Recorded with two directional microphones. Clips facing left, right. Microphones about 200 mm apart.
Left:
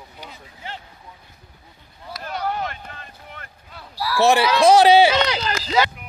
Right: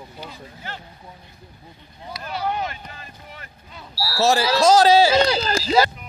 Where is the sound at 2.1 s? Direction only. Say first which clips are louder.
Even; centre (ahead or behind).